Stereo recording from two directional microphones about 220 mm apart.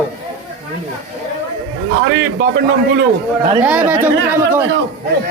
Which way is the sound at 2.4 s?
50° right (ahead or behind).